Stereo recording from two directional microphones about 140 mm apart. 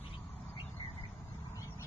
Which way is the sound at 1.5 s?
25° left (ahead or behind).